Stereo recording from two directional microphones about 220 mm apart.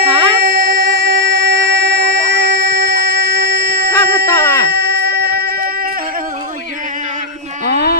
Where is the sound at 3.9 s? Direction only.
15° left (ahead or behind).